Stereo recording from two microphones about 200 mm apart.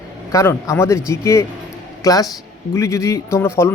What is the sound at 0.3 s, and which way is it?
Speech, 15° left (ahead or behind).